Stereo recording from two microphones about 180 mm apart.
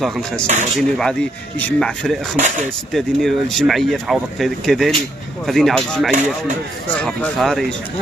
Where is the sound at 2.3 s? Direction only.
45° right (ahead or behind).